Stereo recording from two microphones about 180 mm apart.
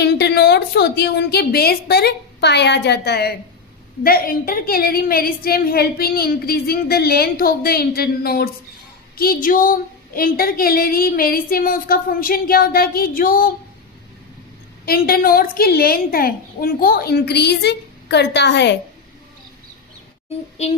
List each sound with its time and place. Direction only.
0.0 s a woman's voice: 65° left (ahead or behind)
14.8 s a woman's voice: 55° left (ahead or behind); by 18.8 s 70° left (ahead or behind)
20.6 s a sound: 40° left (ahead or behind)